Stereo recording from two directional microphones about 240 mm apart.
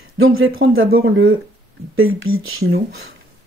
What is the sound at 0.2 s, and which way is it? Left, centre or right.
Speech, right.